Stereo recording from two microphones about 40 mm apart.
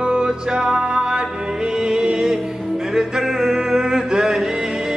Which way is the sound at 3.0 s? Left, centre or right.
Centre.